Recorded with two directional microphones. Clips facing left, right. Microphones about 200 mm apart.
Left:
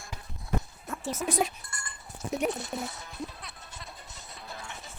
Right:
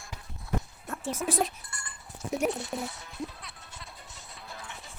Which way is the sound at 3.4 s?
45° left (ahead or behind).